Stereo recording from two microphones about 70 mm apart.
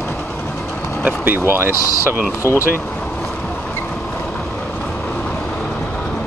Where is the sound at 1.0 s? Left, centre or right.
Right.